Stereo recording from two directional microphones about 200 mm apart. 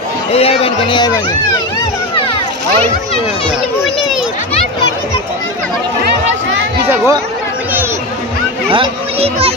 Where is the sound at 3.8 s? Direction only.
Centre (ahead or behind).